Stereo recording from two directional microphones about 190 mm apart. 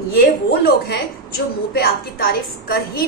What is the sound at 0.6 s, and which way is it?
A woman's voice, 60° left (ahead or behind).